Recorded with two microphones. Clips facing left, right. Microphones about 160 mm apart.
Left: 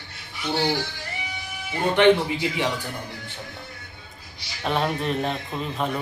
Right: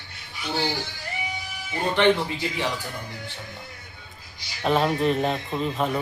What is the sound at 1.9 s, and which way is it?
Speech, 15° left (ahead or behind).